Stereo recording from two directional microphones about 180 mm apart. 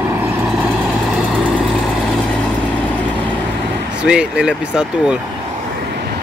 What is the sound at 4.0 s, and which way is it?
Speech, 5° right (ahead or behind).